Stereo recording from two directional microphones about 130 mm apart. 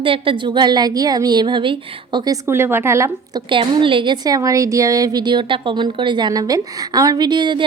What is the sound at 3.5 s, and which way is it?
A woman's voice, 40° right (ahead or behind).